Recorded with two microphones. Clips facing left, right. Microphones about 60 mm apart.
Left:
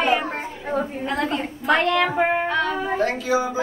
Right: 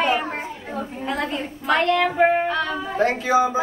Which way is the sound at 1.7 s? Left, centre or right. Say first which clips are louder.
Even; centre.